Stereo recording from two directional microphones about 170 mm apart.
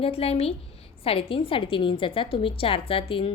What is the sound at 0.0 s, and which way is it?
A woman's voice, 35° left (ahead or behind).